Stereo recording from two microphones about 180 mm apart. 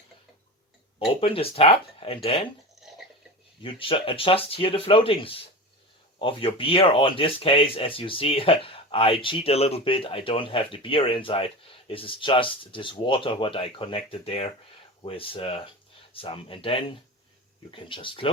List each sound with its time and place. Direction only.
0.9 s speech: 30° left (ahead or behind)
3.6 s speech: 30° left (ahead or behind)